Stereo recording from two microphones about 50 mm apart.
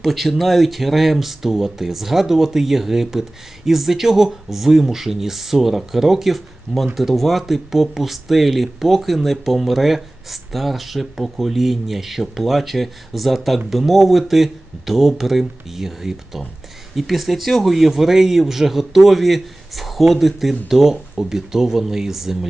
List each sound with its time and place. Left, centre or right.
0.0 s speech: centre